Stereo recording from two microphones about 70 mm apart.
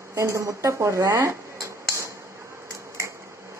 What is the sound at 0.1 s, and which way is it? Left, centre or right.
Speech, right.